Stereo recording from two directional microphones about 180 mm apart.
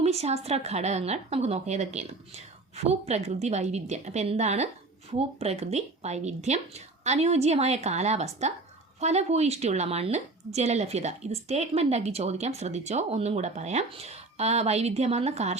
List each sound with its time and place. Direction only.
0.0 s a woman's voice: 35° right (ahead or behind)